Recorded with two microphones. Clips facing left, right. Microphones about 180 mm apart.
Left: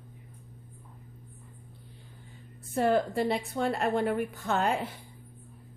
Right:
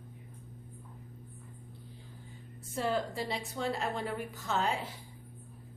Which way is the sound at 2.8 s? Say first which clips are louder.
Left 7 dB; 55° left (ahead or behind).